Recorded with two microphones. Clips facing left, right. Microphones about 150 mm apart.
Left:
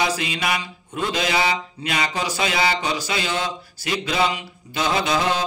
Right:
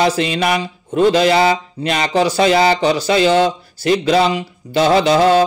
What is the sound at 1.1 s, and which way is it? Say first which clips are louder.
A man's voice: right 9 dB; 45° right (ahead or behind).